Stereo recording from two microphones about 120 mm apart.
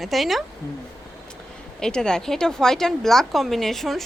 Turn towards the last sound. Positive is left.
turn(degrees=0)  # may be behind; listen again after turning